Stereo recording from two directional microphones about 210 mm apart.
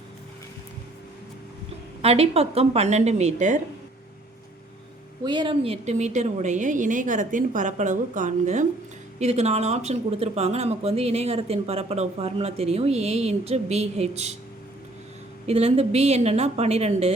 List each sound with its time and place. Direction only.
2.0 s speech: 30° right (ahead or behind)
5.2 s speech: 20° right (ahead or behind)
15.4 s a woman's voice: 30° right (ahead or behind)